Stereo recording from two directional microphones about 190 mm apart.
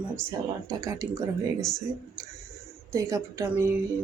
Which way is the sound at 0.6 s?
15° right (ahead or behind).